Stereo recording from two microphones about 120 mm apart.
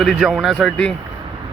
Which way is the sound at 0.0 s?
Centre (ahead or behind).